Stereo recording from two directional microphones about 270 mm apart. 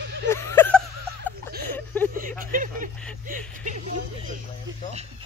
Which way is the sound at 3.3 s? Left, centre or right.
Right.